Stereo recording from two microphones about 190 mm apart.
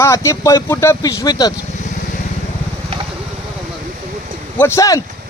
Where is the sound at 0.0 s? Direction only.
15° left (ahead or behind).